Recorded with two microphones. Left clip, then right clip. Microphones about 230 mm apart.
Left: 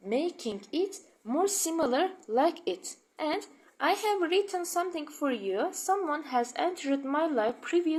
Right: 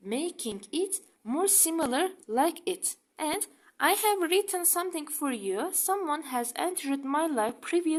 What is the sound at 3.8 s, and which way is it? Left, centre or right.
A woman's voice, right.